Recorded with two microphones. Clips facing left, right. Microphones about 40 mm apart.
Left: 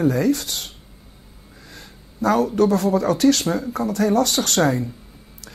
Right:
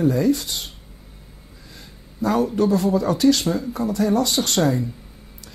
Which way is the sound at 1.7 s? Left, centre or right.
Left.